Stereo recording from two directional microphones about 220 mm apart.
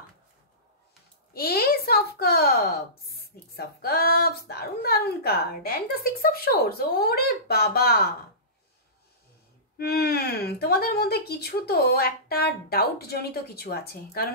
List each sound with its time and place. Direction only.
1.3 s speech: 45° left (ahead or behind)
9.8 s speech: 45° left (ahead or behind)